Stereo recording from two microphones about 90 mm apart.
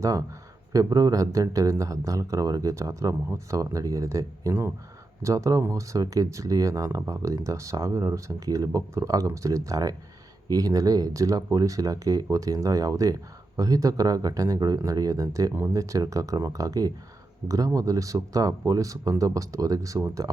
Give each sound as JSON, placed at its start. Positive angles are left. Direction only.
{"t": 0.0, "sound": "speech", "side_deg": -40}